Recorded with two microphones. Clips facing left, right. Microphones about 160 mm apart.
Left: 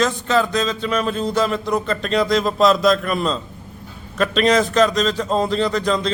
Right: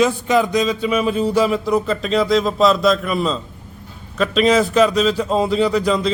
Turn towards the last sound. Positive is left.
turn(degrees=-5)  # may be behind; listen again after turning